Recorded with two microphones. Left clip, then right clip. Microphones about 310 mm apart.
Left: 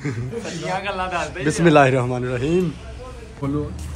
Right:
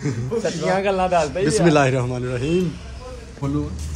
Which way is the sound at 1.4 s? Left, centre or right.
Centre.